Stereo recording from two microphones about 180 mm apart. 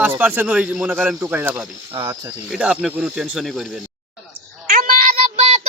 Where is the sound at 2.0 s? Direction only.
20° right (ahead or behind).